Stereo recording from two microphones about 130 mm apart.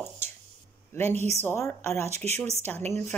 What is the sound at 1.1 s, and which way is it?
Speech, 60° right (ahead or behind).